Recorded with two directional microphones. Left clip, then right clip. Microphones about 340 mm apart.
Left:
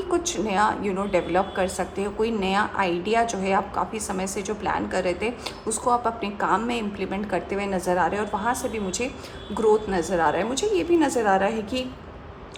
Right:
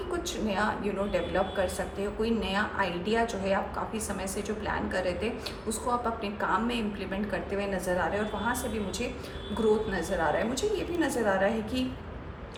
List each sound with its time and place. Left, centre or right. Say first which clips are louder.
0.1 s a woman's voice: left 8 dB; centre
9.6 s a woman's voice: left 6 dB; centre